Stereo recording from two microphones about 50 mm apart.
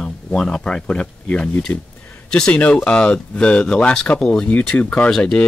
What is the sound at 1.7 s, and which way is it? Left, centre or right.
Speech, left.